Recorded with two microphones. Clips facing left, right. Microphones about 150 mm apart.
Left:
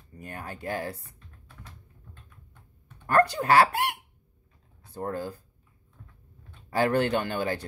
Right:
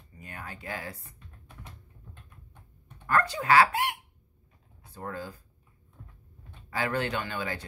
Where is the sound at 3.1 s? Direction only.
70° left (ahead or behind).